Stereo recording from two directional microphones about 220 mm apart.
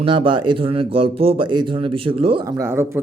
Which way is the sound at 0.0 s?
25° right (ahead or behind).